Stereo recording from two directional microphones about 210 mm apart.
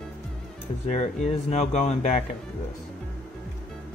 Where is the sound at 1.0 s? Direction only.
30° left (ahead or behind).